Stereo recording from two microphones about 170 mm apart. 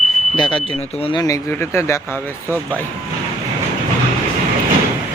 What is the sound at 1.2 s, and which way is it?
Speech, 15° left (ahead or behind).